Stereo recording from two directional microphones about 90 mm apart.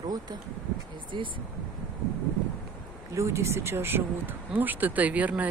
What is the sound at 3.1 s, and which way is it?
Speech, 35° right (ahead or behind).